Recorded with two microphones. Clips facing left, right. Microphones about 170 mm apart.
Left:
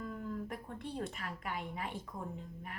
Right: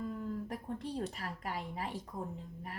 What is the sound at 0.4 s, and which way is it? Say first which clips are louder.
A woman's voice: right 3 dB; 35° right (ahead or behind).